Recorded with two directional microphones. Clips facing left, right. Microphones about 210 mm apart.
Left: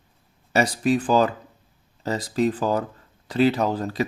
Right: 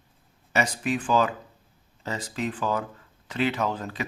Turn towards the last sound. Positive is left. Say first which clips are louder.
# left 5 dB
turn(degrees=35)  # may be behind; listen again after turning